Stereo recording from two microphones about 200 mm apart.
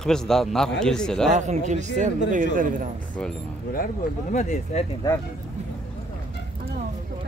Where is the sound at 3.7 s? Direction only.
40° left (ahead or behind).